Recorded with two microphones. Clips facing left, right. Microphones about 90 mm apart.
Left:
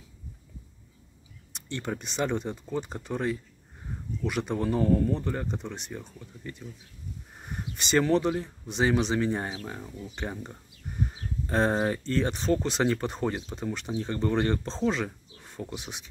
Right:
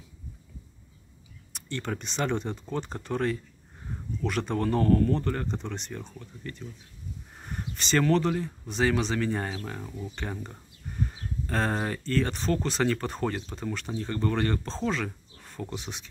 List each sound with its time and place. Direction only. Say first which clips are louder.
1.5 s speech: even; 20° left (ahead or behind)